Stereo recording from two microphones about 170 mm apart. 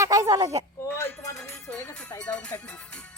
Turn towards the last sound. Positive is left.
turn(degrees=5)  # may be behind; listen again after turning